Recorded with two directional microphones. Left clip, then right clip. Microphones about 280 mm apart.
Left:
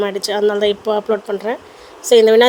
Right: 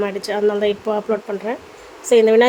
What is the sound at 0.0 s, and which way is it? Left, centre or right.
A woman's voice, left.